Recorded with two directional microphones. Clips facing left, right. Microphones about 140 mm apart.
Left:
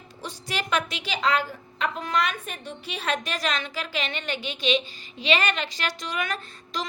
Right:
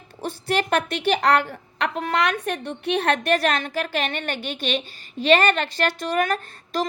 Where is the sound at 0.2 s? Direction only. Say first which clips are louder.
Right 8 dB; 55° right (ahead or behind).